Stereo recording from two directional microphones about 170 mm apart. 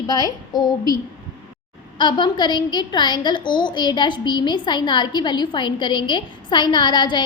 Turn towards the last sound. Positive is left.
turn(degrees=30)  # may be behind; listen again after turning